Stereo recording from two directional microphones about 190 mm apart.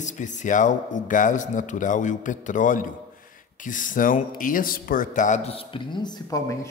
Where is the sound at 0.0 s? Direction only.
40° left (ahead or behind).